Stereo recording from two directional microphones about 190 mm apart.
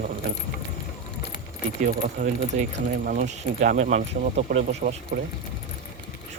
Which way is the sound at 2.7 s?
50° right (ahead or behind).